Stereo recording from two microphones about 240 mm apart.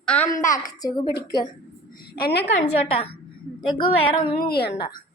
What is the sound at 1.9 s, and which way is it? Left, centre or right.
Speech, left.